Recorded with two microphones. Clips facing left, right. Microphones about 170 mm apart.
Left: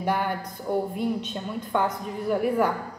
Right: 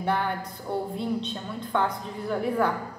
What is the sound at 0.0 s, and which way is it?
A woman's voice, 15° left (ahead or behind).